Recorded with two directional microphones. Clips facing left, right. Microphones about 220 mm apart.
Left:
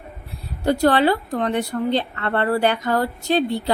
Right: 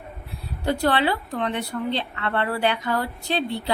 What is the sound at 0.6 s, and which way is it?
A woman's voice, 45° left (ahead or behind).